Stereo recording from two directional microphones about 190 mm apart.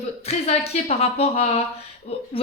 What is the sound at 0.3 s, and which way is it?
A woman's voice, 35° left (ahead or behind).